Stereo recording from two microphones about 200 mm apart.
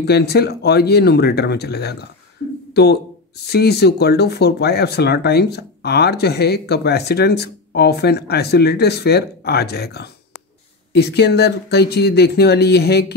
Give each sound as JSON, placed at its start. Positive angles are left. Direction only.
{"t": 0.0, "sound": "speech", "side_deg": 55}